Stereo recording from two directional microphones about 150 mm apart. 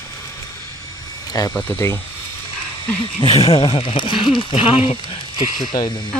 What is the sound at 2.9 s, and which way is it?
Speech, 35° left (ahead or behind).